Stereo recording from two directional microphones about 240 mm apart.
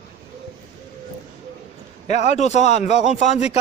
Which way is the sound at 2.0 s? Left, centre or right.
Left.